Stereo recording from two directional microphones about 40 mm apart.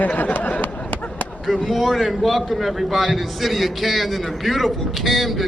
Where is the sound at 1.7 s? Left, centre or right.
Centre.